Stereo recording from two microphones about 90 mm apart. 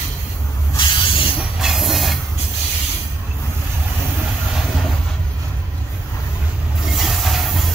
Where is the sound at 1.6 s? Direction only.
Centre (ahead or behind).